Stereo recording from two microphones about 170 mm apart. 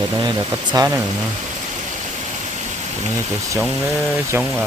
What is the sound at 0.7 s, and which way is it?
Speech, 20° right (ahead or behind).